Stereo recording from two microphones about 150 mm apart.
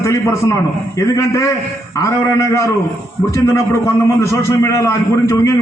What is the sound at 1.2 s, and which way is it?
A man's voice, 20° left (ahead or behind).